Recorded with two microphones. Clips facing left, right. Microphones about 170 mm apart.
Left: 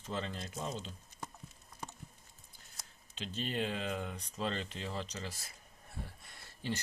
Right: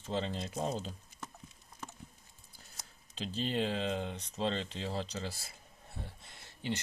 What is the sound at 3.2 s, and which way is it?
Speech, 30° right (ahead or behind).